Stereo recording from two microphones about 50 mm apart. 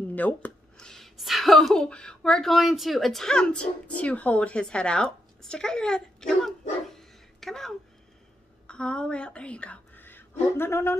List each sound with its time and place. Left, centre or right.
0.1 s speech: left
0.7 s a sound: centre
1.1 s speech: centre
1.8 s speech: centre
2.5 s speech: centre
8.6 s a woman's voice: centre
9.9 s a sound: left
10.7 s speech: left